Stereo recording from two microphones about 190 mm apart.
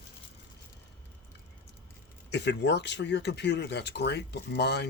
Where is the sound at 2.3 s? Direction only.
65° left (ahead or behind).